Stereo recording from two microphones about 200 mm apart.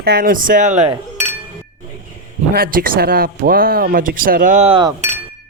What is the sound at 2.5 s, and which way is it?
Speech, 45° right (ahead or behind).